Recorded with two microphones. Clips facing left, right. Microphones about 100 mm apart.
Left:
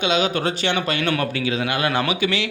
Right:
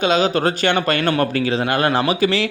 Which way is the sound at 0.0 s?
40° right (ahead or behind).